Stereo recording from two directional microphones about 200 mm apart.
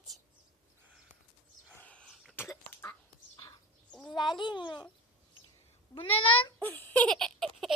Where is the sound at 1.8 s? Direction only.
5° left (ahead or behind).